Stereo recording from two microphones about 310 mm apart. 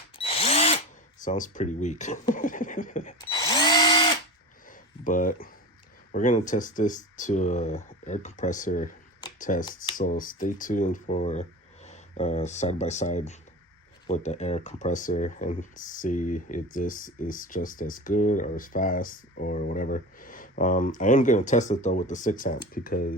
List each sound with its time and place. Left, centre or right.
0.2 s drill: centre
1.2 s speech: left
3.2 s drill: centre
4.7 s a sound: left
6.1 s speech: left